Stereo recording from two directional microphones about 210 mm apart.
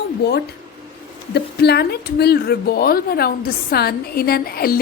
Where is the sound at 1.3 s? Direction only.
50° left (ahead or behind).